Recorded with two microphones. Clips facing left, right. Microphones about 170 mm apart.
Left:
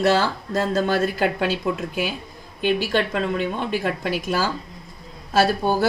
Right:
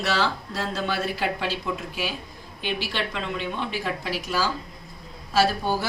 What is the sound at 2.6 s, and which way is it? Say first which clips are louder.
Speech: left 8 dB; 45° left (ahead or behind).